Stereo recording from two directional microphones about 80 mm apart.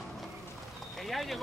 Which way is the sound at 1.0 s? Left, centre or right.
Centre.